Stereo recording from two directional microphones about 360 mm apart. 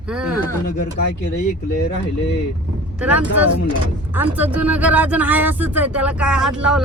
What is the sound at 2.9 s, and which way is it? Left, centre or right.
Speech, centre.